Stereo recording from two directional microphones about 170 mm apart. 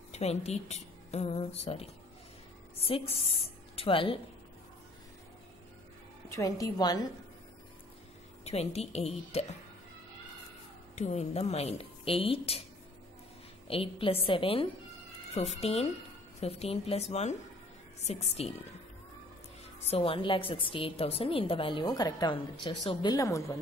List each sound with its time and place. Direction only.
0.1 s a woman's voice: 40° left (ahead or behind)
3.7 s a woman's voice: 30° left (ahead or behind)
6.2 s a woman's voice: 20° left (ahead or behind)
8.5 s a woman's voice: 40° left (ahead or behind)
11.0 s a woman's voice: 40° left (ahead or behind)
13.7 s a woman's voice: 35° left (ahead or behind)
19.9 s a woman's voice: 30° left (ahead or behind)